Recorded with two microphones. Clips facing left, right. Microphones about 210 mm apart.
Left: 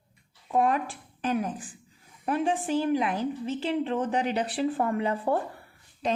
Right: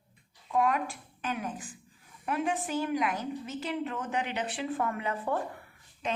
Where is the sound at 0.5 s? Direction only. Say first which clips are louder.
Left 3 dB; 30° left (ahead or behind).